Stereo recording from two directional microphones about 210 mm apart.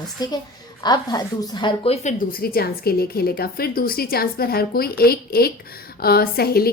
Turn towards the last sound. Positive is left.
turn(degrees=45)  # may be behind; listen again after turning